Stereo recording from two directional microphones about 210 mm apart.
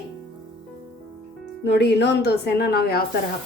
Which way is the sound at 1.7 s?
55° left (ahead or behind).